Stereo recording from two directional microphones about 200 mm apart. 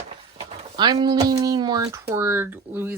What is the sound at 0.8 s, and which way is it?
Speech, 20° right (ahead or behind).